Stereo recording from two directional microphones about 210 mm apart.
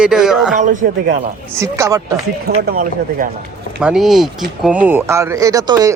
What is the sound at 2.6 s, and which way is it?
Speech, 45° right (ahead or behind).